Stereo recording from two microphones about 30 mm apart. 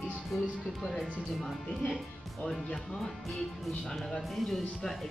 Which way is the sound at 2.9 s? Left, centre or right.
Centre.